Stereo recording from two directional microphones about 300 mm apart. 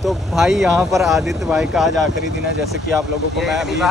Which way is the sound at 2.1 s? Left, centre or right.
Right.